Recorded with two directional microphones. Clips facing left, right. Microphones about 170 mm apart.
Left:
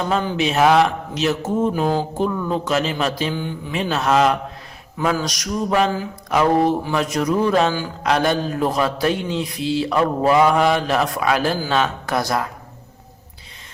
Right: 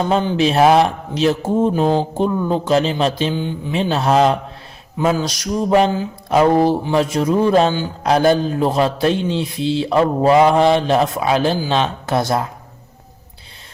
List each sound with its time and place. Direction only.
0.1 s speech: 30° right (ahead or behind)
4.9 s mantra: 20° right (ahead or behind)